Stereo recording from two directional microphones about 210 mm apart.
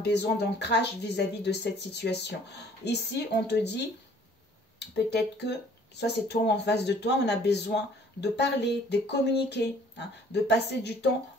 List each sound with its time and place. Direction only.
0.0 s speech: 50° left (ahead or behind)